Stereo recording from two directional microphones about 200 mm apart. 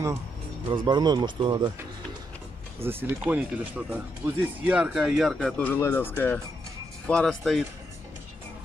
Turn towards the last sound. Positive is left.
turn(degrees=0)  # may be behind; listen again after turning